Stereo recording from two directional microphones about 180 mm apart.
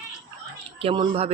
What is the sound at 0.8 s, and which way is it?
Speech, 30° right (ahead or behind).